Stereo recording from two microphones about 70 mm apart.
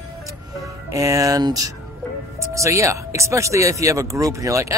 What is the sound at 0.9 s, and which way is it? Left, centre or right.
Speech, right.